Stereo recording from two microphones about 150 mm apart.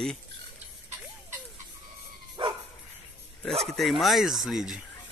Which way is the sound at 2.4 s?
35° right (ahead or behind).